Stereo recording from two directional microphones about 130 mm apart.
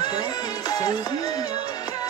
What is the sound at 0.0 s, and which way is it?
Music, 30° left (ahead or behind).